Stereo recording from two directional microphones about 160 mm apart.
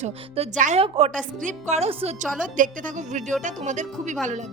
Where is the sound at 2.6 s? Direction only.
55° right (ahead or behind).